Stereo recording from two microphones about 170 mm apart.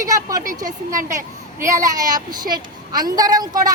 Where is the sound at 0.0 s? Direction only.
20° right (ahead or behind).